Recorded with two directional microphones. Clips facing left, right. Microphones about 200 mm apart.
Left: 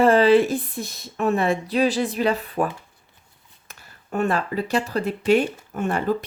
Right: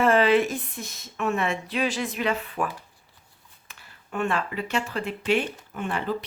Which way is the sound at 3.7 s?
40° left (ahead or behind).